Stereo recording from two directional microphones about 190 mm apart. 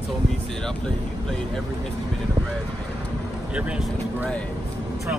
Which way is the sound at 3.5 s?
5° right (ahead or behind).